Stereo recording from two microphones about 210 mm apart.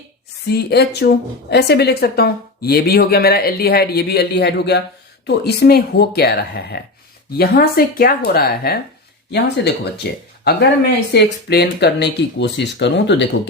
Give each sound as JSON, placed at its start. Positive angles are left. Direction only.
{"t": 0.4, "sound": "a woman's voice", "side_deg": 50}